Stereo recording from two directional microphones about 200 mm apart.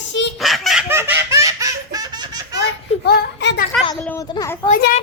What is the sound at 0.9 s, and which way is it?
Baby laughter, 10° right (ahead or behind).